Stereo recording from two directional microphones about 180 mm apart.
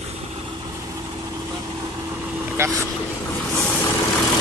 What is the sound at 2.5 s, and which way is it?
Vehicle, 15° right (ahead or behind).